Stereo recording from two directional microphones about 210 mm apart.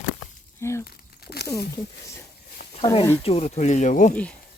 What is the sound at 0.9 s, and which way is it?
Crumpling, 50° left (ahead or behind).